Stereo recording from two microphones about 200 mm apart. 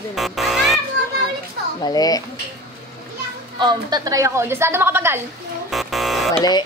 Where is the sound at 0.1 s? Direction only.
Centre (ahead or behind).